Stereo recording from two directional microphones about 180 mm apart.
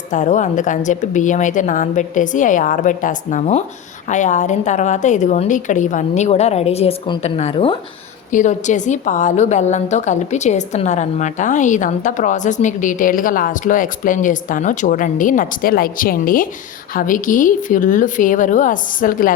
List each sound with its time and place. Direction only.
0.1 s a woman's voice: 45° left (ahead or behind)
8.3 s a woman's voice: 45° left (ahead or behind)